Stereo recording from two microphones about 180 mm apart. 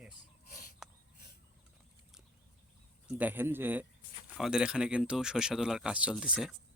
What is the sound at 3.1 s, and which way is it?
Speech, 10° right (ahead or behind).